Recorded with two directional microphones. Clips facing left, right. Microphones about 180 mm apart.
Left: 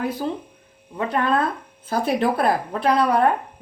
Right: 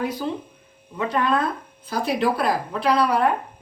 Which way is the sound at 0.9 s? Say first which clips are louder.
Left 1 dB; 50° left (ahead or behind).